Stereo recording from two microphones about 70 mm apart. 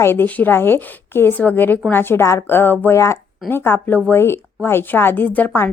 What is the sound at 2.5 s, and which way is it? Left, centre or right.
Speech, left.